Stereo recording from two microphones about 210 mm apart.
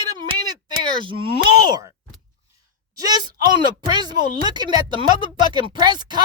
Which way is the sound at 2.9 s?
20° right (ahead or behind).